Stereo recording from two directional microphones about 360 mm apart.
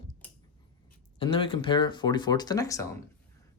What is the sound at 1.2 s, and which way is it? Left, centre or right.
Speech, centre.